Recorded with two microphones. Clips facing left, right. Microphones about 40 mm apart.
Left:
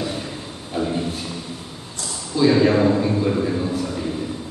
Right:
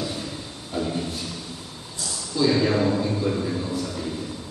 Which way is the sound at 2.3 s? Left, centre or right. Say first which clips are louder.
Left 5 dB; centre.